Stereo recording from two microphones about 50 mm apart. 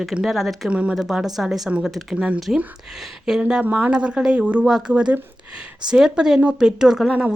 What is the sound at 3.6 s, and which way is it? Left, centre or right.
Speech, right.